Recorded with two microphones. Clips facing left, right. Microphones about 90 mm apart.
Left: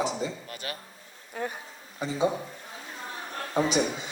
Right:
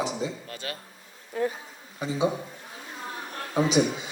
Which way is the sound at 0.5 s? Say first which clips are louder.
Right 1 dB; 15° left (ahead or behind).